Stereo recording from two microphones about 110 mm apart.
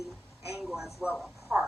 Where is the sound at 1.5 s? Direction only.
10° right (ahead or behind).